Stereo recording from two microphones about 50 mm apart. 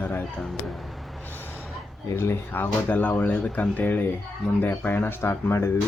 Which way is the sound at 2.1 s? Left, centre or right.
Left.